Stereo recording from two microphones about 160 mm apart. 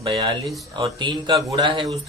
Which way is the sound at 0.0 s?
35° right (ahead or behind).